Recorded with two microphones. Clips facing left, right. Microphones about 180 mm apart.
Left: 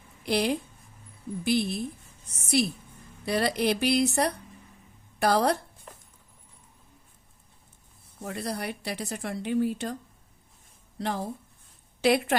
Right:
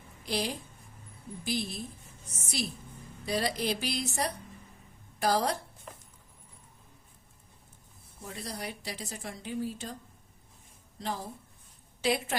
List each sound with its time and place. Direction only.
0.3 s a woman's voice: 65° left (ahead or behind)
5.9 s clip-clop: centre (ahead or behind)
8.2 s a woman's voice: 65° left (ahead or behind)
10.9 s a woman's voice: 65° left (ahead or behind)